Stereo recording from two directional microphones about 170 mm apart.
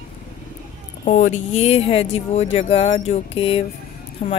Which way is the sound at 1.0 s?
45° left (ahead or behind).